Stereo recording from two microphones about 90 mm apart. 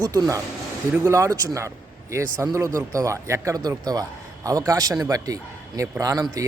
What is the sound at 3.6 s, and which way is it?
Speech, 45° right (ahead or behind).